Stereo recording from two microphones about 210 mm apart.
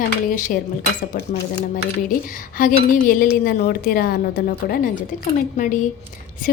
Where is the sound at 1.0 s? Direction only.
50° left (ahead or behind).